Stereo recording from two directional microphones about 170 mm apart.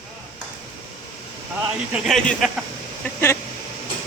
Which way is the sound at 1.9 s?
Centre (ahead or behind).